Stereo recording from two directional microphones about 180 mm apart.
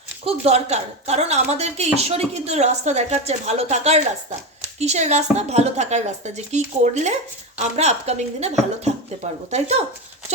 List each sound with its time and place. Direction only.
0.3 s speech: 35° right (ahead or behind)